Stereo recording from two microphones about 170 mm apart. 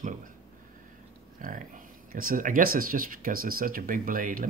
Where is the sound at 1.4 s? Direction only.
50° right (ahead or behind).